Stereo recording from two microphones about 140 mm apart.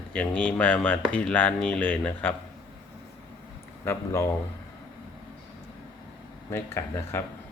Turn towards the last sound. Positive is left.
turn(degrees=20)  # may be behind; listen again after turning